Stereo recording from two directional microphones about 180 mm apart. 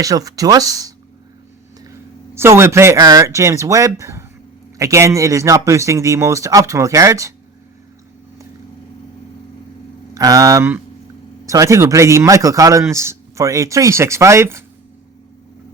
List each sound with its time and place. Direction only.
0.0 s speech: 20° right (ahead or behind)
2.3 s a man's voice: 15° right (ahead or behind)
10.2 s a man's voice: 20° right (ahead or behind)